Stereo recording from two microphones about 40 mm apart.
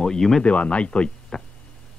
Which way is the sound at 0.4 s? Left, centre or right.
Left.